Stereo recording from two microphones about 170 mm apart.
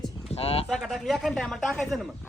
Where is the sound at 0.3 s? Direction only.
35° left (ahead or behind).